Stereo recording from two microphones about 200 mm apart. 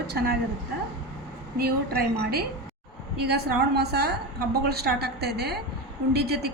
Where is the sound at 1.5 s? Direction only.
50° right (ahead or behind).